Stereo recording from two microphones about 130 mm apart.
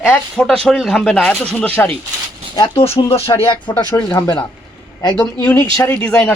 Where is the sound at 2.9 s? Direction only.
50° left (ahead or behind).